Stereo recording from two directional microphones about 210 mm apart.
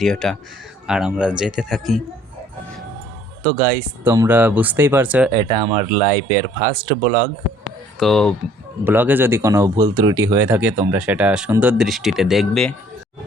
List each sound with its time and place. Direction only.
0.0 s speech: centre (ahead or behind)
3.4 s speech: 45° right (ahead or behind)
3.8 s speech: 10° right (ahead or behind)
5.3 s speech: 20° right (ahead or behind)
5.8 s speech: 35° right (ahead or behind)
7.9 s speech: centre (ahead or behind)
8.8 s speech: 10° right (ahead or behind)